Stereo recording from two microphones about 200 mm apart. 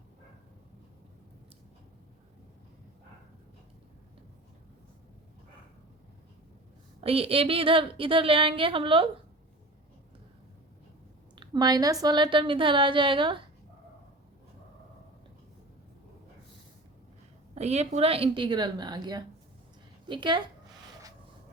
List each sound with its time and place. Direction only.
7.0 s a woman's voice: 30° right (ahead or behind)
11.3 s a woman's voice: 20° right (ahead or behind)
17.5 s a woman's voice: 35° right (ahead or behind)